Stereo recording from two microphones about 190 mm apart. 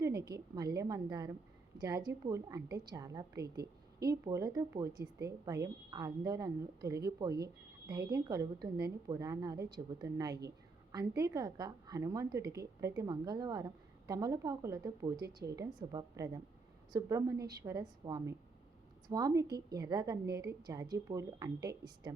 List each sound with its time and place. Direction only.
0.3 s a woman's voice: 20° right (ahead or behind)